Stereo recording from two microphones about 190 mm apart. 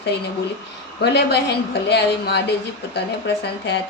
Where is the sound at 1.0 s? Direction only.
60° left (ahead or behind).